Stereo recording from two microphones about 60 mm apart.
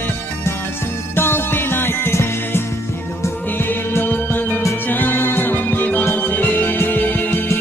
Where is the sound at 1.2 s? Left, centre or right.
Left.